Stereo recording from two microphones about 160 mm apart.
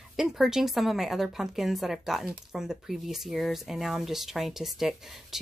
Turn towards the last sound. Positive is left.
turn(degrees=0)  # may be behind; listen again after turning